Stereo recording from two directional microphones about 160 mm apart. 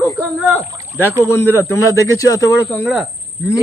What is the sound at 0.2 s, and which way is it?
Speech, 5° right (ahead or behind).